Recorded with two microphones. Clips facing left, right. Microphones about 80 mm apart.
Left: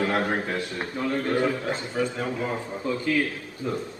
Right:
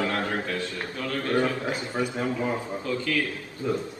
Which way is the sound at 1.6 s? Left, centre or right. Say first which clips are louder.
Left 1 dB; centre.